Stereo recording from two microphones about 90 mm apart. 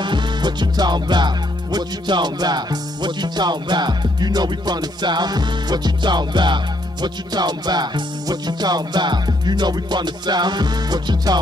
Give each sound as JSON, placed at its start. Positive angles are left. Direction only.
{"t": 0.0, "sound": "music", "side_deg": -55}